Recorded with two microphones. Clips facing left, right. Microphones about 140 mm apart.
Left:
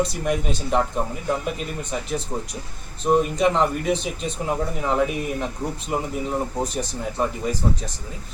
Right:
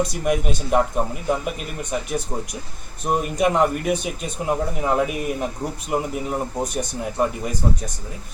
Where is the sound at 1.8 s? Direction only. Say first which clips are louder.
Right 2 dB; 15° right (ahead or behind).